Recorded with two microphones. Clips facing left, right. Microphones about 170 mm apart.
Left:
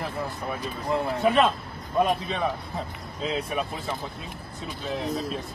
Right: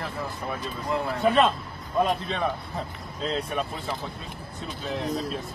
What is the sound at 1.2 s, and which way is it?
A man's voice, centre (ahead or behind).